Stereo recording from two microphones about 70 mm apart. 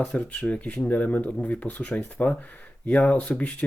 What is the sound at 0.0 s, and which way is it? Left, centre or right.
Speech, centre.